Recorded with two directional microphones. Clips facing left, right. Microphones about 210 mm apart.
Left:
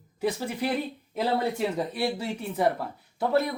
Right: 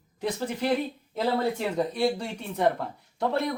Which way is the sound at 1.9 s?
5° left (ahead or behind).